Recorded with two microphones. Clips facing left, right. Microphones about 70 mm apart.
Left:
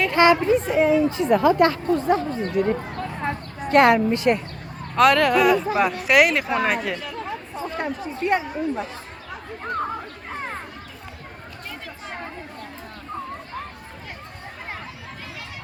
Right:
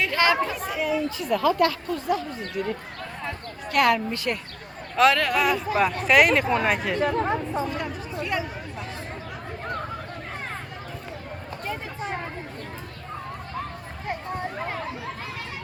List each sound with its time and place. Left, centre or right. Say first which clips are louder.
0.1 s speech: left 6 dB; left
4.9 s speech: left 4 dB; centre
6.9 s speech: right 8 dB; right
7.7 s chatter: left 3 dB; left